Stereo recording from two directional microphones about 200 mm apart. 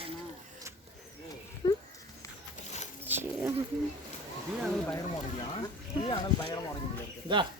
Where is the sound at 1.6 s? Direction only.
20° left (ahead or behind).